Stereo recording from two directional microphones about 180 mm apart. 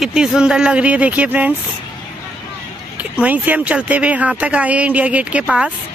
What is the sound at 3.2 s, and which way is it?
Speech, 10° right (ahead or behind).